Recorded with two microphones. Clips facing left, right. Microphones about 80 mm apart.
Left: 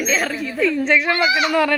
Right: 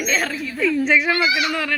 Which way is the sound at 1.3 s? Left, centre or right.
Left.